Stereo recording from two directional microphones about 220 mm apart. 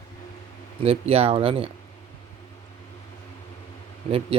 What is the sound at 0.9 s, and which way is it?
Speech, 25° right (ahead or behind).